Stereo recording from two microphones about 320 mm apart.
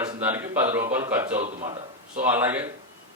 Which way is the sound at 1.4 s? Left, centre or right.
Right.